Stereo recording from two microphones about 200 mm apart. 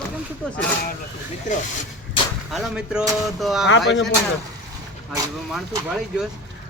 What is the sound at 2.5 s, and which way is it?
Speech, centre (ahead or behind).